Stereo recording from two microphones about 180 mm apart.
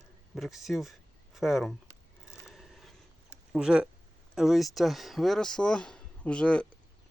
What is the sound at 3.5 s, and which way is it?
Speech, 5° right (ahead or behind).